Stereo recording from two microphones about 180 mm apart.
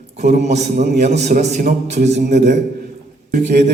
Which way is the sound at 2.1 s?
70° right (ahead or behind).